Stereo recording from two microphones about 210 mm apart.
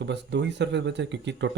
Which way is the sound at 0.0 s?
55° right (ahead or behind).